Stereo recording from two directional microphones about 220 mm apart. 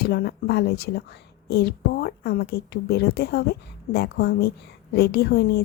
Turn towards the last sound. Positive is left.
turn(degrees=45)  # may be behind; listen again after turning